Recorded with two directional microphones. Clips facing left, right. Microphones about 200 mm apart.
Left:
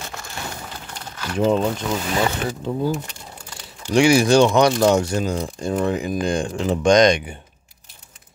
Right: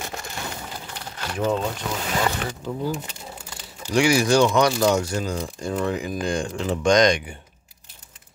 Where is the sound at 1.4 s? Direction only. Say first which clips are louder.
Left 5 dB; 30° left (ahead or behind).